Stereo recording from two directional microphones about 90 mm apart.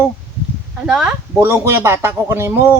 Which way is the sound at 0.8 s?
10° right (ahead or behind).